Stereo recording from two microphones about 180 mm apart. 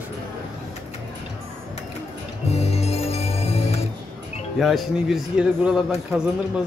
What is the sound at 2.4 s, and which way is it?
Music, 35° left (ahead or behind).